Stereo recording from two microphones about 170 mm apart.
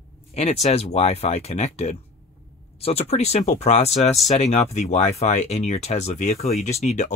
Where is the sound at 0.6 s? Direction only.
40° left (ahead or behind).